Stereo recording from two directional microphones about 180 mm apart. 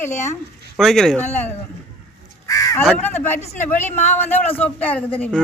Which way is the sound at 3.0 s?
10° left (ahead or behind).